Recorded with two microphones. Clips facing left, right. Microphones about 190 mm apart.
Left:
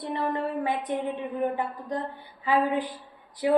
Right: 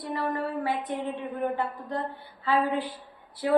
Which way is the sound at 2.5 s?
15° left (ahead or behind).